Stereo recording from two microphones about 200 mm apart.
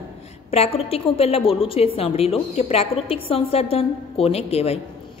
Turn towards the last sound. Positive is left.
turn(degrees=30)  # may be behind; listen again after turning